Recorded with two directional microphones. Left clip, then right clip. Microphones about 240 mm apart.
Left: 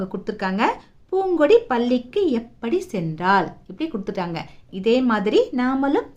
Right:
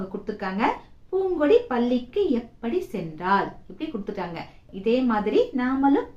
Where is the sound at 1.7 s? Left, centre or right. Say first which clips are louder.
Left 4 dB; left.